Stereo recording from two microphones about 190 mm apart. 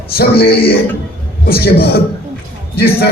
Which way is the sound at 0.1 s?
55° left (ahead or behind).